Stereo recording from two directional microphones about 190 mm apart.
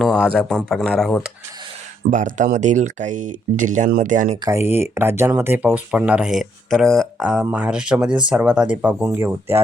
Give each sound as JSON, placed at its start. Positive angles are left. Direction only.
{"t": 0.0, "sound": "speech", "side_deg": 5}
{"t": 2.0, "sound": "speech", "side_deg": -40}
{"t": 4.4, "sound": "speech", "side_deg": -15}